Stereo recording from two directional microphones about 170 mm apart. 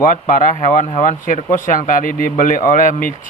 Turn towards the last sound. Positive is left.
turn(degrees=50)  # may be behind; listen again after turning